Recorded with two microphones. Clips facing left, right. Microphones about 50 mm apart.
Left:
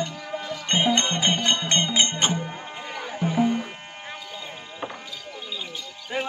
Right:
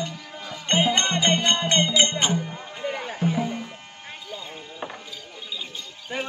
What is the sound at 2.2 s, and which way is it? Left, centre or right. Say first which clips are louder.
Music: right 1 dB; left.